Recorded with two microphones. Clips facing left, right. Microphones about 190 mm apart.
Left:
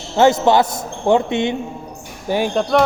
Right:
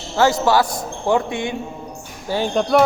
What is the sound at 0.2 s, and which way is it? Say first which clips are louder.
A man's voice: left 3 dB; 20° left (ahead or behind).